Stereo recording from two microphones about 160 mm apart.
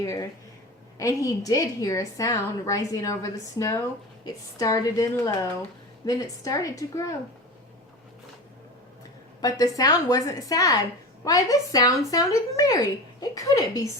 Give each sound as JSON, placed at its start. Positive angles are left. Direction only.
{"t": 0.0, "sound": "a woman's voice", "side_deg": 20}
{"t": 9.4, "sound": "a woman's voice", "side_deg": 25}